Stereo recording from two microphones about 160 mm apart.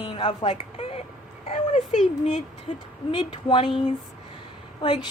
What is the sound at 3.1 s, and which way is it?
Speech, 30° left (ahead or behind).